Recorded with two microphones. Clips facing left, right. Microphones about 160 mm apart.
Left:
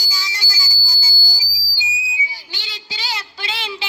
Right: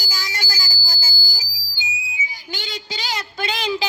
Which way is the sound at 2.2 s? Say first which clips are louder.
Right 3 dB; 45° right (ahead or behind).